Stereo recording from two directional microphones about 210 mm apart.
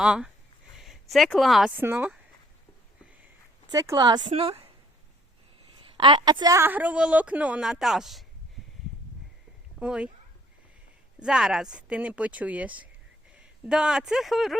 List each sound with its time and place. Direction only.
0.0 s speech: 5° right (ahead or behind)
3.7 s speech: 15° right (ahead or behind)
5.7 s a woman's voice: 25° right (ahead or behind); by 8.2 s centre (ahead or behind)
9.8 s speech: 5° right (ahead or behind)
11.2 s speech: 5° right (ahead or behind)